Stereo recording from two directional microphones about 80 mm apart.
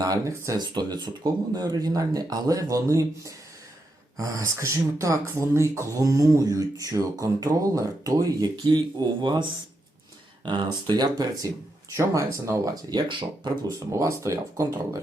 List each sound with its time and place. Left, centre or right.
0.0 s speech: right
0.6 s speech: right
8.5 s speech: right
11.9 s speech: right
12.9 s speech: right
13.7 s speech: right